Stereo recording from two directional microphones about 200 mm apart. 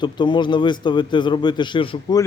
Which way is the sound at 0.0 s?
25° left (ahead or behind).